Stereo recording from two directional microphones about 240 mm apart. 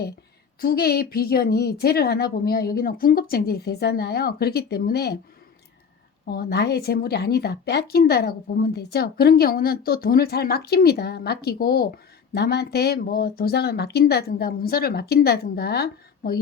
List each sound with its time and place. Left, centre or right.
0.6 s a woman's voice: left
6.2 s a woman's voice: left